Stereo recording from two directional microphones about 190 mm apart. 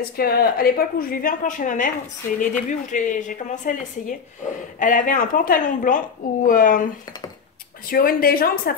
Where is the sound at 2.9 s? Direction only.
40° left (ahead or behind).